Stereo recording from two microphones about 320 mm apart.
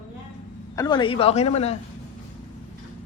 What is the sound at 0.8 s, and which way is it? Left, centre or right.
A man's voice, centre.